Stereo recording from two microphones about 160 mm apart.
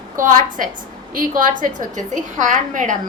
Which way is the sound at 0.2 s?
55° right (ahead or behind).